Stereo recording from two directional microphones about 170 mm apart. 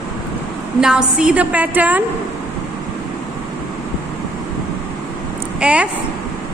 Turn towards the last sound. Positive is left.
turn(degrees=-5)  # may be behind; listen again after turning